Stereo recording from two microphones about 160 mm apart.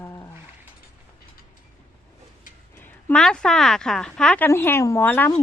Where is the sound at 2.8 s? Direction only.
5° left (ahead or behind).